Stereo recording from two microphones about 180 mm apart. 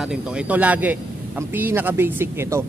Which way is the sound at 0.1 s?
10° right (ahead or behind).